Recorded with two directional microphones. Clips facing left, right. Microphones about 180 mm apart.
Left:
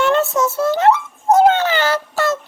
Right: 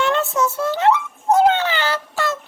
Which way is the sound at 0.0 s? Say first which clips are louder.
Left 4 dB; 40° left (ahead or behind).